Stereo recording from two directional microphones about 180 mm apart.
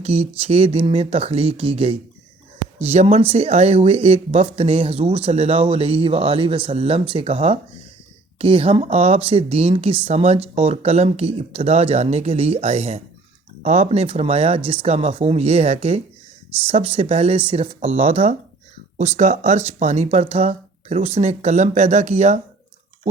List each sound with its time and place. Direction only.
0.0 s speech: 35° right (ahead or behind)